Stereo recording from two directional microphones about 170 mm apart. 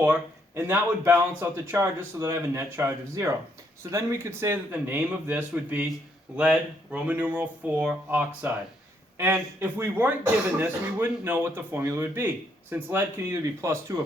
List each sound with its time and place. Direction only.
0.0 s speech: 15° right (ahead or behind)